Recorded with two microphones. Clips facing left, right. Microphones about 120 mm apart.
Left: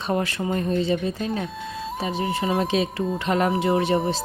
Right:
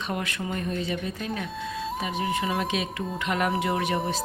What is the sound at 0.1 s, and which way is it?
Speech, 35° left (ahead or behind).